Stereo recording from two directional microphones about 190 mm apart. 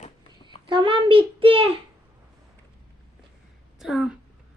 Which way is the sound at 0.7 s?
25° right (ahead or behind).